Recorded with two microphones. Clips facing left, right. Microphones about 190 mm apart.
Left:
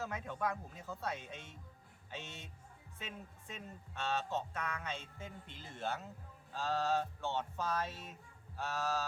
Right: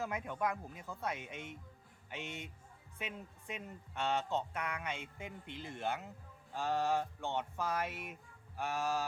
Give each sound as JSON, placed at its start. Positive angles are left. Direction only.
{"t": 0.0, "sound": "speech", "side_deg": -15}